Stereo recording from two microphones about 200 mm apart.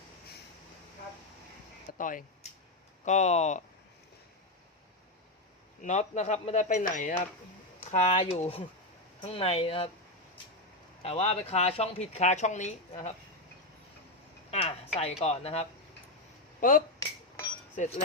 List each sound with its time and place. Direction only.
1.9 s a sound: 40° left (ahead or behind)
3.0 s speech: 35° left (ahead or behind)
5.8 s speech: 35° left (ahead or behind)
11.0 s speech: 30° left (ahead or behind)
14.5 s speech: 30° left (ahead or behind)
16.6 s speech: 45° left (ahead or behind)